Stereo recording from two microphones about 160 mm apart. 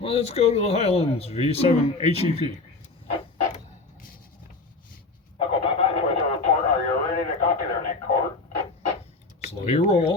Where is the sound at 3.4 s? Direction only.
55° left (ahead or behind).